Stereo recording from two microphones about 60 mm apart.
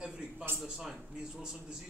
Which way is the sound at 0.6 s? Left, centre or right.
Centre.